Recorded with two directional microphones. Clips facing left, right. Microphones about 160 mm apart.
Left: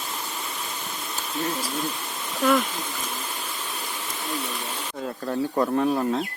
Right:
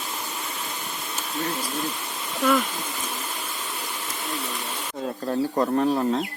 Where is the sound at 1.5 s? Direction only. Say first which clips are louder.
Left 1 dB; centre (ahead or behind).